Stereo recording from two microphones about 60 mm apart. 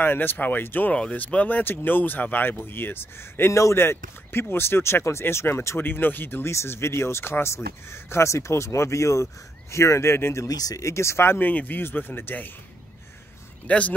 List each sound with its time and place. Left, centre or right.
0.0 s speech: left
5.8 s speech: left
6.5 s speech: left
10.5 s speech: left
11.3 s speech: left
13.7 s speech: left